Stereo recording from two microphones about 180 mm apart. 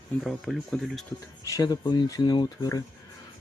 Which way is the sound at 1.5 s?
20° left (ahead or behind).